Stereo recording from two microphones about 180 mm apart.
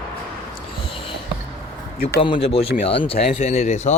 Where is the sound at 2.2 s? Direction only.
30° left (ahead or behind).